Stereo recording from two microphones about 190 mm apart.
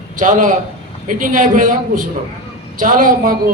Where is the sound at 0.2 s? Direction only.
40° right (ahead or behind).